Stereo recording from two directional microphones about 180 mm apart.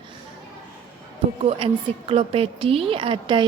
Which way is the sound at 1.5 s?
30° right (ahead or behind).